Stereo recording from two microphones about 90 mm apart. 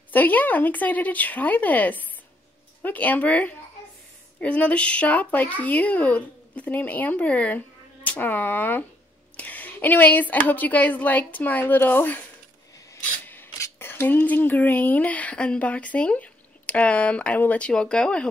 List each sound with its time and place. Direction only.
0.1 s a woman's voice: 20° left (ahead or behind)
13.2 s filing: 20° left (ahead or behind)
13.7 s speech: 25° left (ahead or behind)